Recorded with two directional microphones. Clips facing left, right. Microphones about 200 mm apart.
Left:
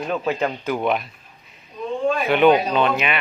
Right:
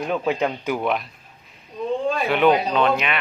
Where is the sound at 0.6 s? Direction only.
5° right (ahead or behind).